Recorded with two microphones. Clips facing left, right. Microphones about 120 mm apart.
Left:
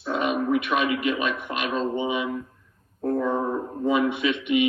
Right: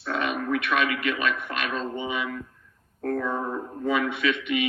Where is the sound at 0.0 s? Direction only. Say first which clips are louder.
Left 3 dB; 40° left (ahead or behind).